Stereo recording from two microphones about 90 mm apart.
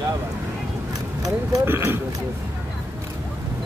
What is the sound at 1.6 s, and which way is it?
Speech, 25° right (ahead or behind).